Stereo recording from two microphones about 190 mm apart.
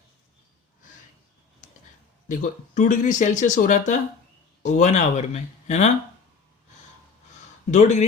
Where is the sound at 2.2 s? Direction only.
45° left (ahead or behind).